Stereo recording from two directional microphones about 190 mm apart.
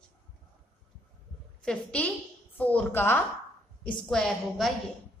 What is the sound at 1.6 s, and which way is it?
A woman's voice, 5° left (ahead or behind).